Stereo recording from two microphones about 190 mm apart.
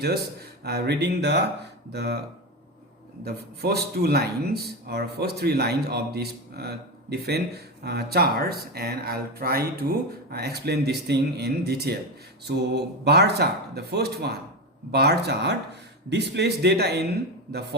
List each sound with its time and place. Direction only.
0.6 s speech: 60° right (ahead or behind)
3.2 s speech: 55° right (ahead or behind)